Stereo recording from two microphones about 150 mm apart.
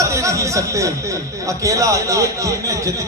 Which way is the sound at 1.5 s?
20° right (ahead or behind).